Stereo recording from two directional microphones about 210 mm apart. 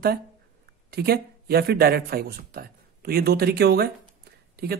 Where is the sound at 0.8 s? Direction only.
45° right (ahead or behind).